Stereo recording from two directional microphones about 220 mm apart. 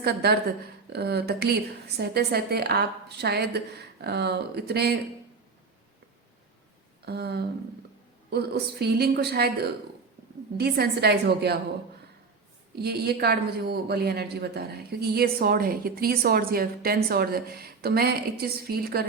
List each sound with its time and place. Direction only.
0.0 s a woman's voice: 45° right (ahead or behind)
7.0 s a woman's voice: 45° right (ahead or behind)
12.8 s a woman's voice: 45° right (ahead or behind)